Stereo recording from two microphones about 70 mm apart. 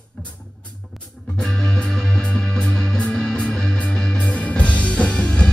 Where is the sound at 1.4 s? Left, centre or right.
Centre.